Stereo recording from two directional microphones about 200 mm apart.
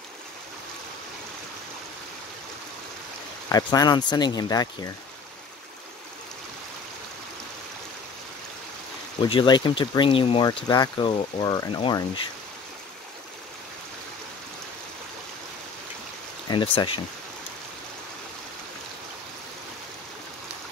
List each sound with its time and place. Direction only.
3.4 s speech: 15° left (ahead or behind)
9.2 s speech: 25° left (ahead or behind)
16.4 s speech: 25° left (ahead or behind)